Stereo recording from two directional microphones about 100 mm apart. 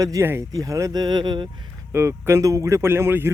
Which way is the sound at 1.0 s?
45° right (ahead or behind).